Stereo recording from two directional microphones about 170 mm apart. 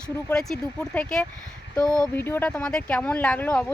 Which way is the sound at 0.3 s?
5° left (ahead or behind).